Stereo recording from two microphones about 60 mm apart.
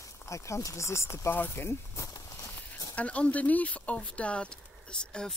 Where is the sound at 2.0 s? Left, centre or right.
Left.